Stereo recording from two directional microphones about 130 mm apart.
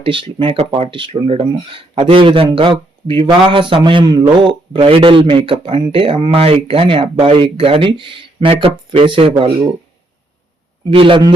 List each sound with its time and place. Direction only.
0.0 s a man's voice: 40° right (ahead or behind)
10.9 s a man's voice: 40° right (ahead or behind)